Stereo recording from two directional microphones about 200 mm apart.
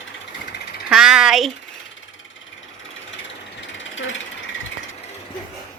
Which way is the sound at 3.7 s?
70° left (ahead or behind).